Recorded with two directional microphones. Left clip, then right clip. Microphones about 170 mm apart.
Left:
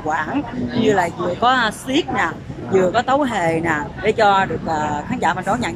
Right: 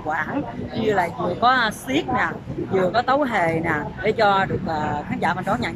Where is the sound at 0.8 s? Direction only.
5° left (ahead or behind).